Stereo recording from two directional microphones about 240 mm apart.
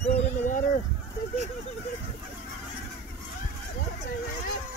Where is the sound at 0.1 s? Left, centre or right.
Left.